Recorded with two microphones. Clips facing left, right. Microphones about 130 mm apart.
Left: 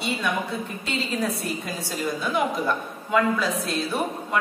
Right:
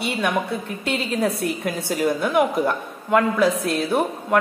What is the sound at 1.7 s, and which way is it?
Speech, 60° right (ahead or behind).